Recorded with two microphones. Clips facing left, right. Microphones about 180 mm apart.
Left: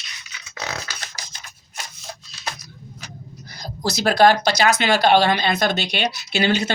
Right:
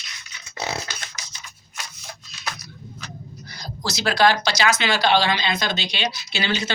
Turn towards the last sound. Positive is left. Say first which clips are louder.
# left 6 dB
turn(degrees=55)  # may be behind; listen again after turning